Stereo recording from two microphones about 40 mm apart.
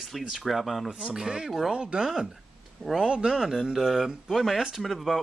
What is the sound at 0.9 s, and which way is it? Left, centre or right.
Speech, centre.